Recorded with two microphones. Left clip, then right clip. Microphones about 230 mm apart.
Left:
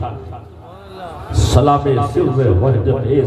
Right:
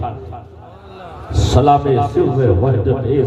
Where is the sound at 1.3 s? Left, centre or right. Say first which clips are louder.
Right 1 dB; right.